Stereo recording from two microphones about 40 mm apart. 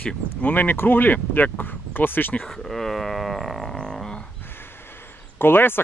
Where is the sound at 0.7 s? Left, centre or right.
Left.